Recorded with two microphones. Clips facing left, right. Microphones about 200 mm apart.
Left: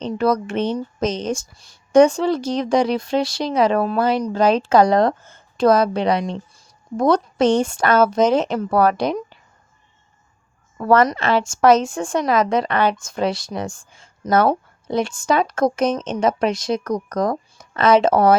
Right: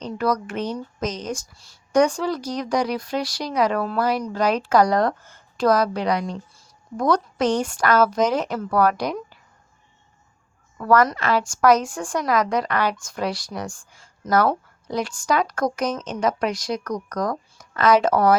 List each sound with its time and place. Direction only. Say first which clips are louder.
0.0 s a woman's voice: left 4 dB; 25° left (ahead or behind)
10.8 s a woman's voice: left 3 dB; 25° left (ahead or behind)